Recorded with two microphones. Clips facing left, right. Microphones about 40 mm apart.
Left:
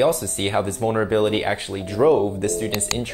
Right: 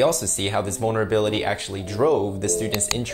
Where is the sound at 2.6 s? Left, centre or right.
Centre.